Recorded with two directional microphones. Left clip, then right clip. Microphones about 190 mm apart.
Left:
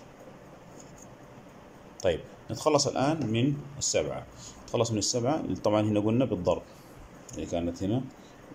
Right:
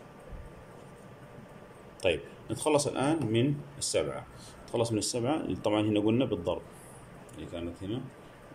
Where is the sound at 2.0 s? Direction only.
Centre (ahead or behind).